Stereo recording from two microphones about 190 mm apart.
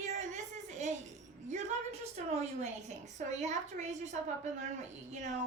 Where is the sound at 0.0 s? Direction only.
40° right (ahead or behind).